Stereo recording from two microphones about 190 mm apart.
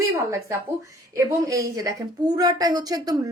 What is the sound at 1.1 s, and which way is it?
A woman's voice, 15° right (ahead or behind).